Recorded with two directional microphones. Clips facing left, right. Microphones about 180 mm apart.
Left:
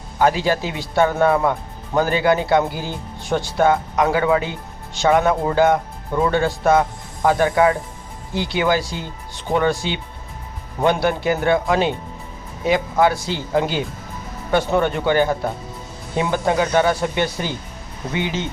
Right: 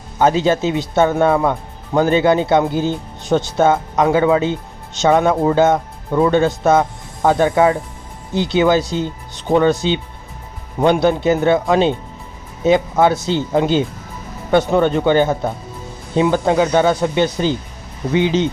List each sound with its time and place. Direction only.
0.2 s speech: 20° right (ahead or behind)